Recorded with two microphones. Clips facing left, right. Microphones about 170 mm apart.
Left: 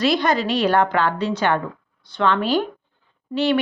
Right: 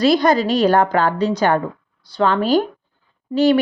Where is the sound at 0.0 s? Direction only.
40° right (ahead or behind).